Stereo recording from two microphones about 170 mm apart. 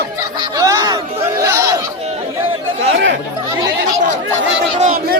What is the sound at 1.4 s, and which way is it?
Chatter, 15° right (ahead or behind).